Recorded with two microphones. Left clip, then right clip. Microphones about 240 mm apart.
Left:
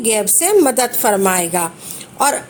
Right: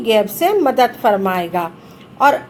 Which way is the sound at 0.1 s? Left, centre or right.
Left.